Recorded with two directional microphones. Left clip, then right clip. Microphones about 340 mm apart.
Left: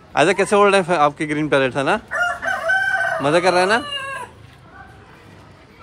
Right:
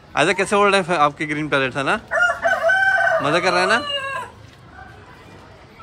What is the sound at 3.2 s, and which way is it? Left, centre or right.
Speech, centre.